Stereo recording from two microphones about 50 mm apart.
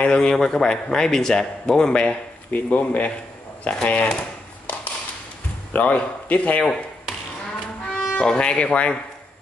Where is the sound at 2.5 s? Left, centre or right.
Left.